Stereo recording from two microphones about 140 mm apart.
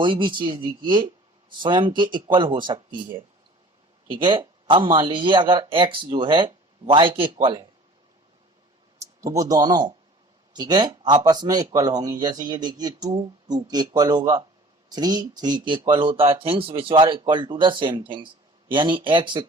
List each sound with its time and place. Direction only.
0.0 s speech: 35° right (ahead or behind)
9.0 s speech: 25° right (ahead or behind)